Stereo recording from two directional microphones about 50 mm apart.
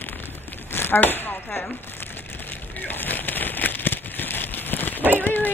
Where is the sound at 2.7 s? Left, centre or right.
Left.